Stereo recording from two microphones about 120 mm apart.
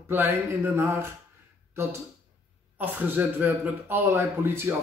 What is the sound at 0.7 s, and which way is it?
Speech, 20° right (ahead or behind).